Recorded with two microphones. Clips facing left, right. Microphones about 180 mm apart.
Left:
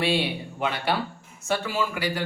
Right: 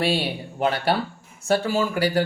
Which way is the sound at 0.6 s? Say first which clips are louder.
Right 4 dB; 35° right (ahead or behind).